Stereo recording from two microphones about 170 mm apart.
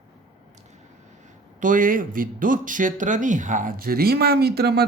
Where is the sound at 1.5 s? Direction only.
50° right (ahead or behind).